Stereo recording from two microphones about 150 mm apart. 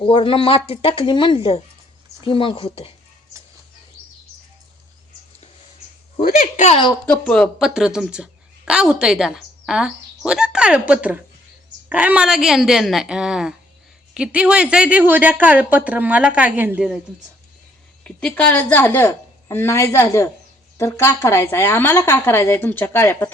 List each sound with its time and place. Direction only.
0.0 s speech: 35° left (ahead or behind)
6.1 s speech: 70° left (ahead or behind)
6.7 s speech: 35° left (ahead or behind)
7.0 s a woman's voice: 10° left (ahead or behind); by 16.9 s 10° right (ahead or behind)
18.0 s speech: 5° left (ahead or behind)